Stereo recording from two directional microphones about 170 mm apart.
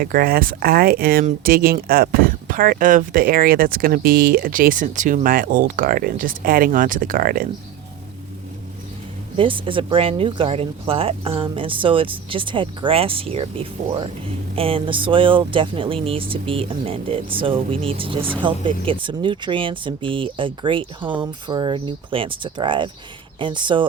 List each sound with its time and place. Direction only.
0.0 s speech: 60° right (ahead or behind)
9.4 s speech: 30° right (ahead or behind)